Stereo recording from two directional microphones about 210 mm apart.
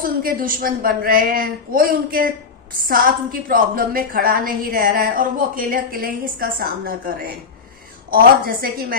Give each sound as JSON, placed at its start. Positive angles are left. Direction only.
{"t": 0.0, "sound": "a woman's voice", "side_deg": -45}